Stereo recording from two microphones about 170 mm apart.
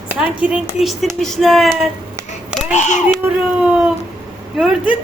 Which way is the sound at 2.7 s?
45° left (ahead or behind).